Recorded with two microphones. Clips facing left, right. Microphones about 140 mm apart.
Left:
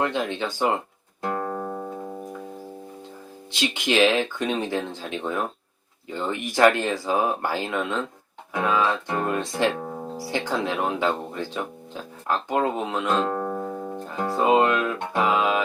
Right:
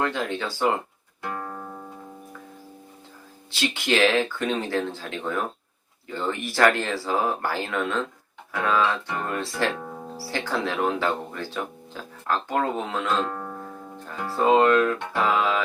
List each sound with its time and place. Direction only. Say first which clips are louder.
0.0 s speech: left 1 dB; 20° left (ahead or behind)
1.4 s music: left 7 dB; 35° left (ahead or behind)
3.5 s speech: left 1 dB; 15° left (ahead or behind)